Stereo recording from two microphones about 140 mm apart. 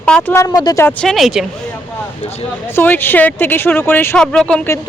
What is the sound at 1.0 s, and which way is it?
Speech, centre (ahead or behind).